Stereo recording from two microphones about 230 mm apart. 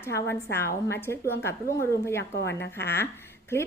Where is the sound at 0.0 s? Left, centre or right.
Centre.